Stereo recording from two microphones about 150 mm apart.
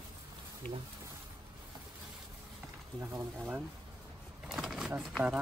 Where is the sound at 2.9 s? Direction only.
15° right (ahead or behind).